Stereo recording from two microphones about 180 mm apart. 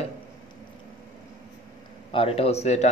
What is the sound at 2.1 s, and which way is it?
Speech, 30° left (ahead or behind).